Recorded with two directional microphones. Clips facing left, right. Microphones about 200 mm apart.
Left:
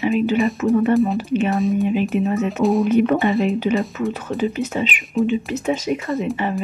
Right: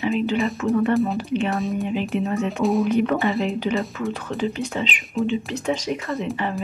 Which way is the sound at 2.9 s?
20° left (ahead or behind).